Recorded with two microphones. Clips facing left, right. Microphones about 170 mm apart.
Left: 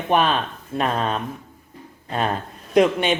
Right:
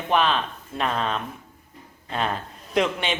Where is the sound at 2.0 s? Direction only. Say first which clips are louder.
Left 3 dB; 45° left (ahead or behind).